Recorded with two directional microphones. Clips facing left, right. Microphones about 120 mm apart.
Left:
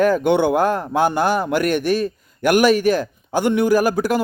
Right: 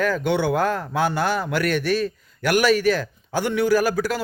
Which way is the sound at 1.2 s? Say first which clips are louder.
Left 4 dB; 50° left (ahead or behind).